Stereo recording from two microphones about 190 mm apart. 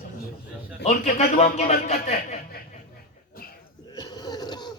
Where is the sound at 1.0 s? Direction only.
35° left (ahead or behind).